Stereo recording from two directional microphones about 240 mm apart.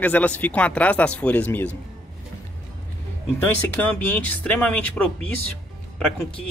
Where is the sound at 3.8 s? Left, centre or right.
Centre.